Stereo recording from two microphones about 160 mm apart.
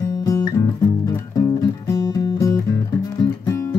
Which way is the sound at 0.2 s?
20° left (ahead or behind).